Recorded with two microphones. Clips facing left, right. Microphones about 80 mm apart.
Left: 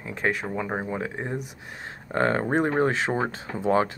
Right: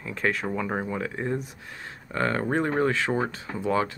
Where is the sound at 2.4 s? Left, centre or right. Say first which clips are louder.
Left 2 dB; left.